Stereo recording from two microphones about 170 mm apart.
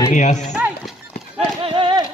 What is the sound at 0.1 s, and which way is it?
Speech, 45° left (ahead or behind).